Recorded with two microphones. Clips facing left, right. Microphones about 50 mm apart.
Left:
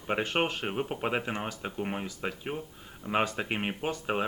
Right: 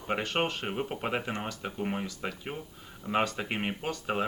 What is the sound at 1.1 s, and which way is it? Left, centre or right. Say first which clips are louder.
Speech: left 1 dB; centre.